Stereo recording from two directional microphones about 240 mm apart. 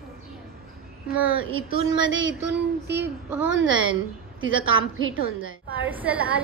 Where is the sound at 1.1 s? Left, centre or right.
Centre.